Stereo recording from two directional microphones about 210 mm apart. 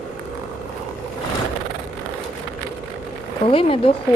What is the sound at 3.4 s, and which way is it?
Speech, 25° left (ahead or behind).